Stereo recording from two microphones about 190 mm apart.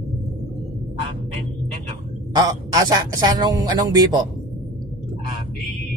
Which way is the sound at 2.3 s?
20° right (ahead or behind).